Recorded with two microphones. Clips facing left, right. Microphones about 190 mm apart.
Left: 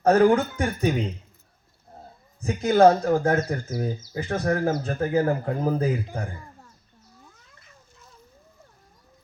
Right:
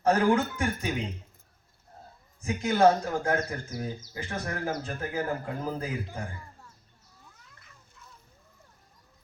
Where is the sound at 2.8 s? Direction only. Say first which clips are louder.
Left 5 dB; 55° left (ahead or behind).